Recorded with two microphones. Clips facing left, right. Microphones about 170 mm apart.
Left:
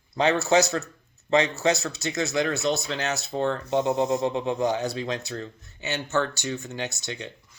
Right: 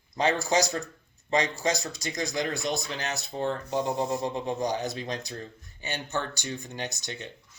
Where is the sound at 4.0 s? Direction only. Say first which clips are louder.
Left 5 dB; 20° left (ahead or behind).